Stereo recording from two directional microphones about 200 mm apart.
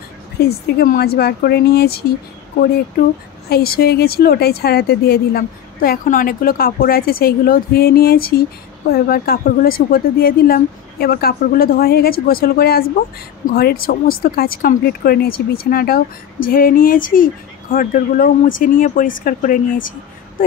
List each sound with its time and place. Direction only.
0.5 s speech: 50° left (ahead or behind)
3.4 s speech: 50° left (ahead or behind)